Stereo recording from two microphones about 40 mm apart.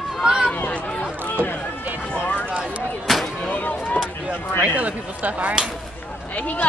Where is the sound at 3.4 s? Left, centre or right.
Left.